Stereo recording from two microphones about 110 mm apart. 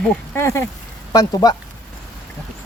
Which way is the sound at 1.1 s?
35° left (ahead or behind).